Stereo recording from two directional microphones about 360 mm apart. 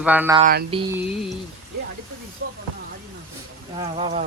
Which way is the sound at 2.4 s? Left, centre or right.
Right.